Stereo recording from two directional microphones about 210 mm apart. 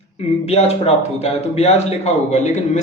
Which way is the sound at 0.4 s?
30° left (ahead or behind).